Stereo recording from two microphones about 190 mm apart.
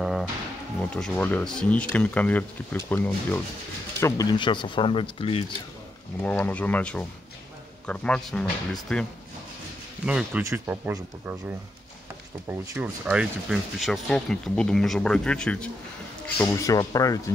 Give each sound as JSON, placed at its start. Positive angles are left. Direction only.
{"t": 0.0, "sound": "music", "side_deg": 0}
{"t": 0.9, "sound": "speech", "side_deg": 5}
{"t": 4.0, "sound": "speech", "side_deg": 20}
{"t": 6.2, "sound": "speech", "side_deg": 10}
{"t": 16.3, "sound": "speech", "side_deg": 20}